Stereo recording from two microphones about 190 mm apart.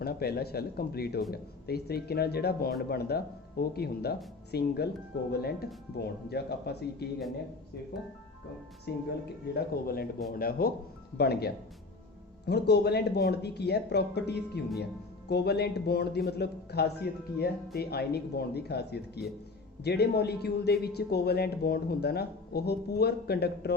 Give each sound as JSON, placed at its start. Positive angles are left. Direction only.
{"t": 0.0, "sound": "speech", "side_deg": 55}
{"t": 8.9, "sound": "speech", "side_deg": 60}